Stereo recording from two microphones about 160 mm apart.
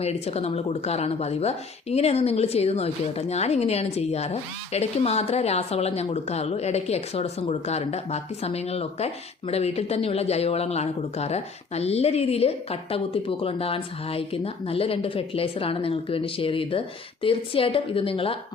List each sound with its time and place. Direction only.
0.0 s speech: 40° left (ahead or behind)